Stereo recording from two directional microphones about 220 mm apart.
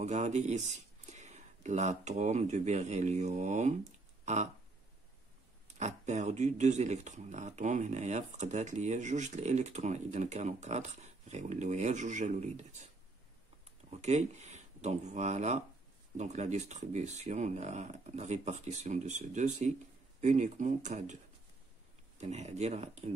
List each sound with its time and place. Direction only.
0.0 s speech: 30° right (ahead or behind)
5.8 s speech: 30° right (ahead or behind)
13.8 s speech: 30° right (ahead or behind)
22.2 s speech: 30° right (ahead or behind)